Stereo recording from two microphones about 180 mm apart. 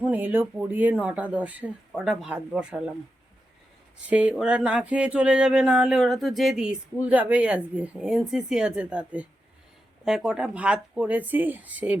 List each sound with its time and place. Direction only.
0.0 s speech: 10° right (ahead or behind)
4.1 s speech: 5° right (ahead or behind)